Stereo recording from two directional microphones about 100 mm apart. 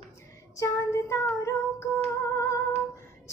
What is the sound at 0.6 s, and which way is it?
Child singing, 30° left (ahead or behind).